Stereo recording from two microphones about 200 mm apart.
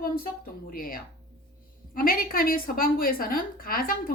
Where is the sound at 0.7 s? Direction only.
45° left (ahead or behind).